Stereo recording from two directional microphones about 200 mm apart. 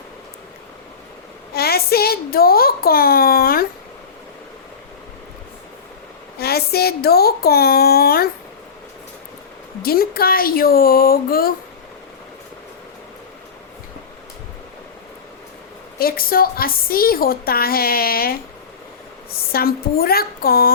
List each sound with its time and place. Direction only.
1.5 s a child's voice: 50° left (ahead or behind)
6.4 s speech: 50° left (ahead or behind)
9.8 s a woman's voice: 50° left (ahead or behind)
16.0 s a woman's voice: 45° left (ahead or behind)
19.5 s a woman's voice: 50° left (ahead or behind)